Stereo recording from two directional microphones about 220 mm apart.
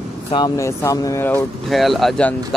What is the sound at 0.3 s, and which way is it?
Speech, 15° left (ahead or behind).